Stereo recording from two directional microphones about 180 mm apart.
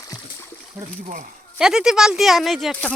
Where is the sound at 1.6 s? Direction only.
5° right (ahead or behind).